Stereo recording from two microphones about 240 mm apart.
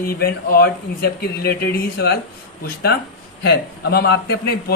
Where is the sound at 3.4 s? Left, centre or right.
Left.